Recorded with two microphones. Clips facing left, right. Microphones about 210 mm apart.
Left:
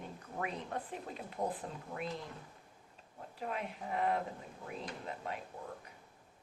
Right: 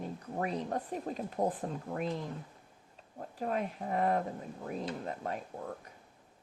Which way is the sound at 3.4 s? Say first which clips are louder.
Right 6 dB; 40° right (ahead or behind).